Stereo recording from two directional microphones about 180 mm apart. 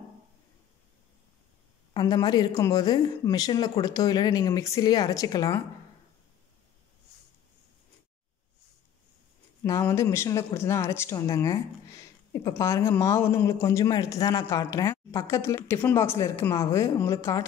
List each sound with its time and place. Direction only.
2.0 s speech: 20° left (ahead or behind)
9.6 s speech: 15° left (ahead or behind)